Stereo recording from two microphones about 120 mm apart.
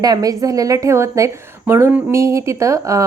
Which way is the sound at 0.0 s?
30° right (ahead or behind).